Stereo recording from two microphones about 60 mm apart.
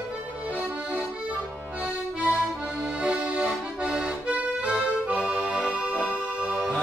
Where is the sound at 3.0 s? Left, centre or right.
Centre.